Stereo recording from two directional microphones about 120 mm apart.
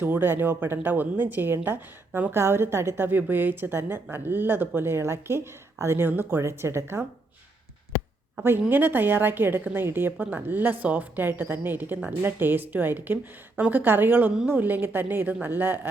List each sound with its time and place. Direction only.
0.0 s a woman's voice: 15° right (ahead or behind)
8.4 s speech: 15° right (ahead or behind)